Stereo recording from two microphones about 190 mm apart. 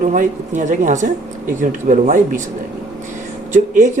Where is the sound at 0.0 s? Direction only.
40° right (ahead or behind).